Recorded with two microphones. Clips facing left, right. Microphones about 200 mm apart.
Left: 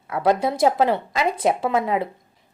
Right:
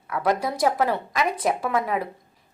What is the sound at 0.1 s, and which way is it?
A woman's voice, 25° left (ahead or behind).